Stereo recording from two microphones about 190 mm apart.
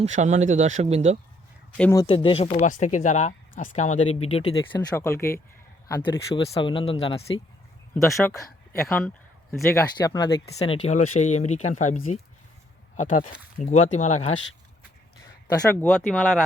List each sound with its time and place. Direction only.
0.0 s speech: 40° right (ahead or behind)
1.8 s speech: 15° left (ahead or behind)
2.0 s speech: 30° left (ahead or behind)
5.9 s speech: 25° left (ahead or behind)
8.0 s speech: 15° left (ahead or behind)
10.6 s speech: 35° left (ahead or behind)
15.2 s speech: 15° left (ahead or behind)